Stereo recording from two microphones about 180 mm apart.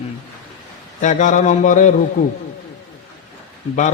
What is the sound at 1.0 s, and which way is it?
Speech, 45° left (ahead or behind).